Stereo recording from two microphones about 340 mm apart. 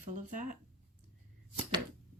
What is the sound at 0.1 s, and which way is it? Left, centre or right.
Speech, right.